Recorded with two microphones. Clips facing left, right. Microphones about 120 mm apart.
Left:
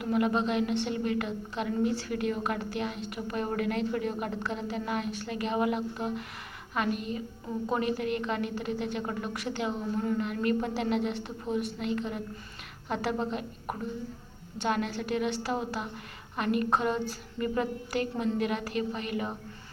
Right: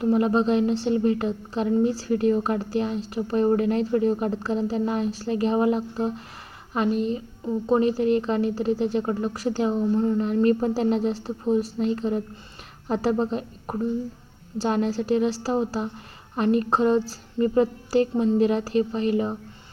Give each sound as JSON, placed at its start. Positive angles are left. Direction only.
{"t": 0.0, "sound": "a woman's voice", "side_deg": -30}